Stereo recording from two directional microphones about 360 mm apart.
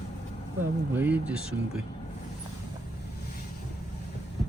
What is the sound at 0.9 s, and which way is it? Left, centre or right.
Speech, centre.